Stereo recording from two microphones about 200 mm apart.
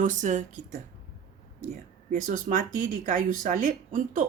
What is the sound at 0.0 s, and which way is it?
Speech, 40° right (ahead or behind).